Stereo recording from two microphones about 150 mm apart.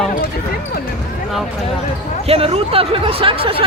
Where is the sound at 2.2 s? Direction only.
40° right (ahead or behind).